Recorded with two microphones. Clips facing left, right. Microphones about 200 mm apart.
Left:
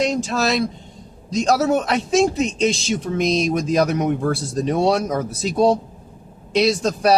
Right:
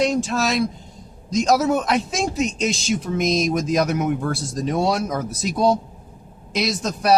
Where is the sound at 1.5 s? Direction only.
30° left (ahead or behind).